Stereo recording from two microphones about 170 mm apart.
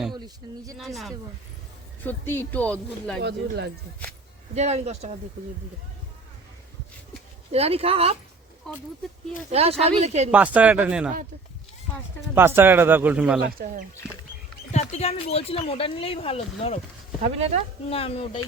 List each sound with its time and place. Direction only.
0.4 s speech: 25° right (ahead or behind)
0.8 s speech: centre (ahead or behind)
2.0 s speech: 15° left (ahead or behind)
3.2 s speech: 75° right (ahead or behind)
4.5 s speech: 40° right (ahead or behind)
7.5 s speech: 35° right (ahead or behind)
8.7 s speech: centre (ahead or behind)
9.5 s speech: 35° right (ahead or behind)
10.3 s speech: 10° right (ahead or behind)
12.3 s speech: 15° right (ahead or behind)
13.6 s speech: 70° right (ahead or behind)
14.7 s speech: 40° left (ahead or behind)
17.2 s speech: 40° right (ahead or behind)
17.8 s speech: 35° left (ahead or behind)